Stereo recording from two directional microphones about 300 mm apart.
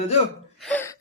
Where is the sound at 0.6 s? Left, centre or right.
Centre.